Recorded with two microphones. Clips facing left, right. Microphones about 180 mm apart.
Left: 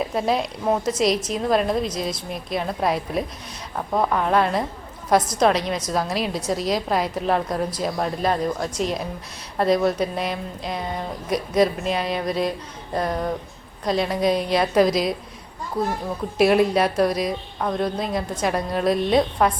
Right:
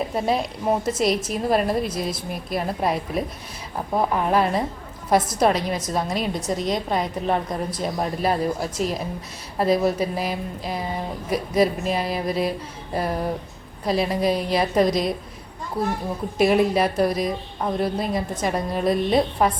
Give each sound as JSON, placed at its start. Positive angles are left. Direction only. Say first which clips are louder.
{"t": 0.1, "sound": "speech", "louder": "left 1 dB", "side_deg": 0}
{"t": 16.4, "sound": "speech", "louder": "left 1 dB", "side_deg": 0}